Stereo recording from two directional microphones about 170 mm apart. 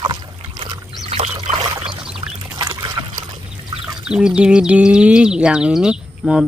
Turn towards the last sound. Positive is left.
turn(degrees=-5)  # may be behind; listen again after turning